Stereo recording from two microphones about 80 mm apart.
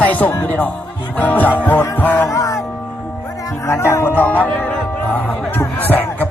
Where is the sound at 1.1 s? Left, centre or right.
Left.